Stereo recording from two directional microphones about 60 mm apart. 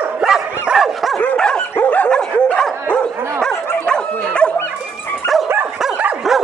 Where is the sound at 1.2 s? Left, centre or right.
Centre.